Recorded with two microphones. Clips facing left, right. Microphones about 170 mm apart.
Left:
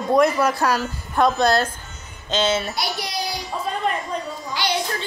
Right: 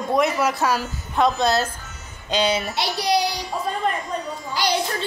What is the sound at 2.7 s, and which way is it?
Child singing, 30° right (ahead or behind).